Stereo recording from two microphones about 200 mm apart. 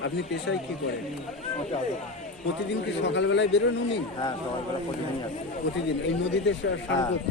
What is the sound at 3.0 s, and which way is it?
Speech, 65° left (ahead or behind).